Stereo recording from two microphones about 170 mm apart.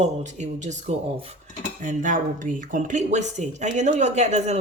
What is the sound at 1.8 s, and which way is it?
Speech, 50° right (ahead or behind).